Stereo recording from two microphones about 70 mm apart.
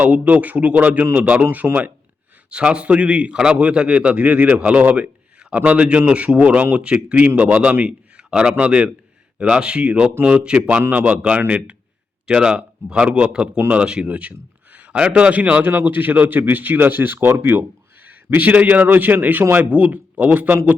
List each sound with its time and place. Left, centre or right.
0.0 s a man's voice: right
1.5 s a man's voice: right
18.0 s a man's voice: right